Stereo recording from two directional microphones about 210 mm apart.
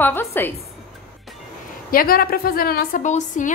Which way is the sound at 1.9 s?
45° left (ahead or behind).